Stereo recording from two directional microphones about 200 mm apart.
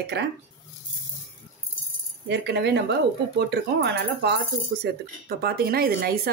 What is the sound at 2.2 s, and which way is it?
Speech, 60° right (ahead or behind).